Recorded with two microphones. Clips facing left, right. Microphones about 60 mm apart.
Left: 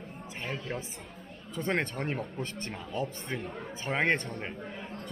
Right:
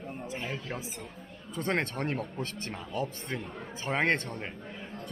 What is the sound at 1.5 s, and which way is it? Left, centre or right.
A man's voice, centre.